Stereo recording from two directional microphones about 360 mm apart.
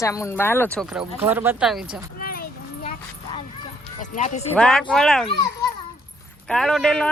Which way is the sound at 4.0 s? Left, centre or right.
Centre.